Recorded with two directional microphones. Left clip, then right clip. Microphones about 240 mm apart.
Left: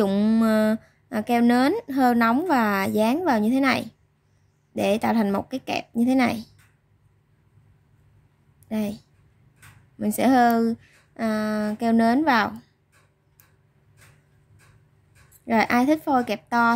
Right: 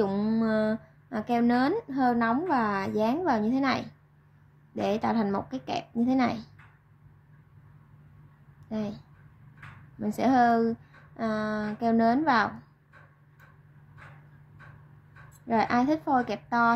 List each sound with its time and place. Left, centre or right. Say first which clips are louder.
0.0 s speech: left 6 dB; left
8.6 s a woman's voice: left 5 dB; left
15.4 s speech: left 5 dB; left